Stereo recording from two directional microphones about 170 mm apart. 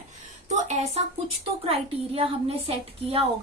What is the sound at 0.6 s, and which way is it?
A woman's voice, 40° right (ahead or behind).